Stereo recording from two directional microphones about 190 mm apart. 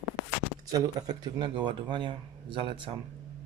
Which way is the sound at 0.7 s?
20° right (ahead or behind).